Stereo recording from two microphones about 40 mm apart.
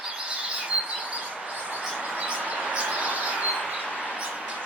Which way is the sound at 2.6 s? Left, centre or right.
Right.